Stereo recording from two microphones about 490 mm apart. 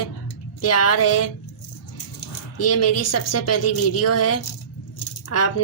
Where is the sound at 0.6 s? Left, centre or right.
Left.